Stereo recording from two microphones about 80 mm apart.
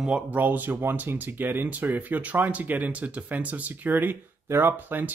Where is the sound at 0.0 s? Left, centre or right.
Centre.